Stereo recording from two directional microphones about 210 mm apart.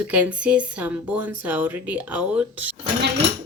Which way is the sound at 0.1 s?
5° right (ahead or behind).